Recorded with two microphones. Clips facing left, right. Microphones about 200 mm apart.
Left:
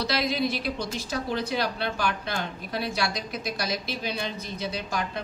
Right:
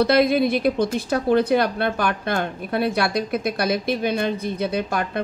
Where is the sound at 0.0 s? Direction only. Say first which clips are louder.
Right 10 dB; 55° right (ahead or behind).